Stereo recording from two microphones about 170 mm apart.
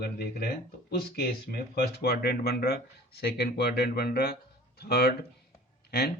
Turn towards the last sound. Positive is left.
turn(degrees=65)  # may be behind; listen again after turning